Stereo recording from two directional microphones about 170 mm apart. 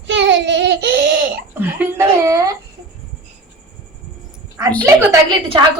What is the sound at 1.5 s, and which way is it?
Speech, 10° right (ahead or behind).